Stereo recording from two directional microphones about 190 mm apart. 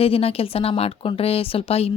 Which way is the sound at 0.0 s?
30° left (ahead or behind).